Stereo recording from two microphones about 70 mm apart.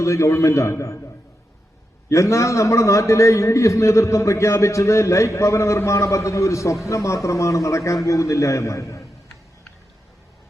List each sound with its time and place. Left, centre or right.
0.0 s a man's voice: left